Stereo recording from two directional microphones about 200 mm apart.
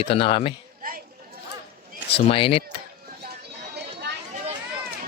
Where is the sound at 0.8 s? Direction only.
45° right (ahead or behind).